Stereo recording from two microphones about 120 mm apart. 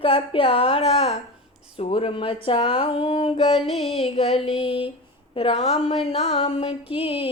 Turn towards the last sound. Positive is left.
turn(degrees=50)  # may be behind; listen again after turning